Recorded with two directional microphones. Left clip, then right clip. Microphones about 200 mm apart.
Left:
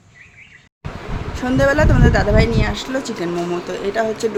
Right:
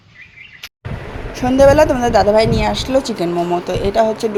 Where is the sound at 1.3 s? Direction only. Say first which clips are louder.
Right 6 dB; 15° right (ahead or behind).